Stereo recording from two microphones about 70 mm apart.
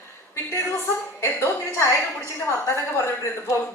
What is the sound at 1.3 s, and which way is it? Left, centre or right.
A woman's voice, left.